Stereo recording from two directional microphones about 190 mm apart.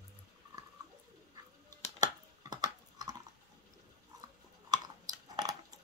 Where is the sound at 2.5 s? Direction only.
20° right (ahead or behind).